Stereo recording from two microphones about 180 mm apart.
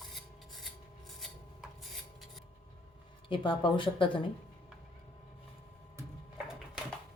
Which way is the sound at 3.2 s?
30° left (ahead or behind).